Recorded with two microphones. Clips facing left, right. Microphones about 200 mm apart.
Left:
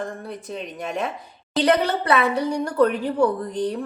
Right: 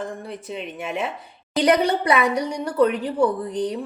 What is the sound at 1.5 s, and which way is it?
A woman's voice, 15° right (ahead or behind).